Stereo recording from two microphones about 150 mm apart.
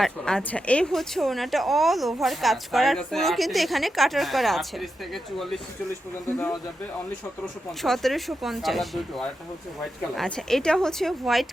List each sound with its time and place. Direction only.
0.0 s a woman's voice: 5° left (ahead or behind)
7.8 s a woman's voice: centre (ahead or behind)